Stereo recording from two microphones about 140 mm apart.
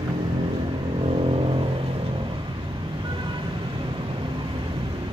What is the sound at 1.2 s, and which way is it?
Vehicle, 40° right (ahead or behind).